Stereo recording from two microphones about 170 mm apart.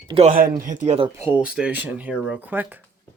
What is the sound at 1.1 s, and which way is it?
Speech, 10° right (ahead or behind).